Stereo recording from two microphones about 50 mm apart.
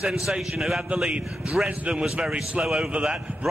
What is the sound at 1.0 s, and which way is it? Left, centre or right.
A man's voice, right.